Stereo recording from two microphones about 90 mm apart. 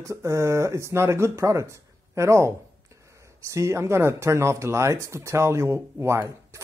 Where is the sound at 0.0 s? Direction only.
35° right (ahead or behind).